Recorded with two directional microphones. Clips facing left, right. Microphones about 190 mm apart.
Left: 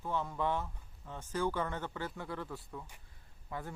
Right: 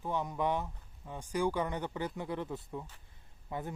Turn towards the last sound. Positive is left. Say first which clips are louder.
# right 3 dB
turn(degrees=-20)  # may be behind; listen again after turning